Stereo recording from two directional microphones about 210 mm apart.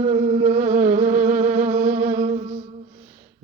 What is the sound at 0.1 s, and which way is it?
Music, 35° right (ahead or behind).